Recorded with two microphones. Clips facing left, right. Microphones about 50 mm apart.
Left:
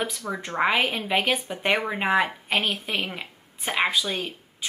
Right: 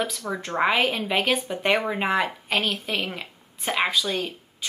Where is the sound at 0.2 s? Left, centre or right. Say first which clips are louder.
Even; centre.